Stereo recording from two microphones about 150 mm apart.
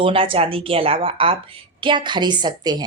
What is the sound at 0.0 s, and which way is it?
A woman's voice, 35° right (ahead or behind).